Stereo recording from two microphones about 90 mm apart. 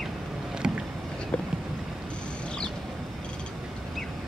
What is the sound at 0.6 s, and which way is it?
Boat, 10° right (ahead or behind).